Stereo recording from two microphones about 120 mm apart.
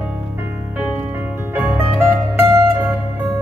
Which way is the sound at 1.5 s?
15° right (ahead or behind).